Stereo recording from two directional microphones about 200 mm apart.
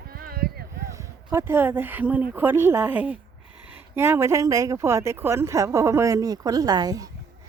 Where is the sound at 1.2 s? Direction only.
10° right (ahead or behind).